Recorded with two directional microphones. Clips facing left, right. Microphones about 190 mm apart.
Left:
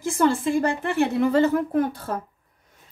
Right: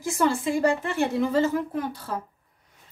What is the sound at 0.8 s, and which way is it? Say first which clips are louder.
Speech: left 3 dB; 60° left (ahead or behind).